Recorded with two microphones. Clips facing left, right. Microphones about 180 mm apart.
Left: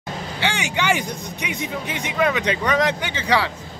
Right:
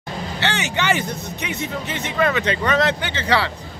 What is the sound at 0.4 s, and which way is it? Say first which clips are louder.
A man's voice: even; 10° left (ahead or behind).